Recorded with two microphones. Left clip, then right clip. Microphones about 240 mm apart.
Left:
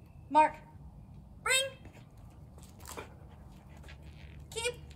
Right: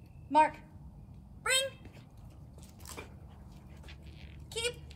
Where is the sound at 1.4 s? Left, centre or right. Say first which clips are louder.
Left 1 dB; centre.